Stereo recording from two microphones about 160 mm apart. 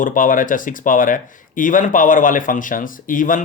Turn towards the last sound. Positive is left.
turn(degrees=55)  # may be behind; listen again after turning